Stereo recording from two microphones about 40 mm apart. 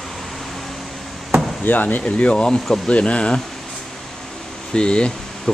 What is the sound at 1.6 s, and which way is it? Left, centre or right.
Speech, left.